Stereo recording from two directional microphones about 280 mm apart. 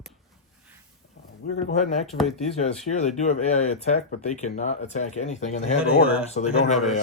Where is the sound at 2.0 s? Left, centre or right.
Centre.